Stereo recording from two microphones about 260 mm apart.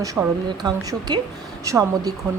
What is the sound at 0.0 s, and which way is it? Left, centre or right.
A woman's voice, centre.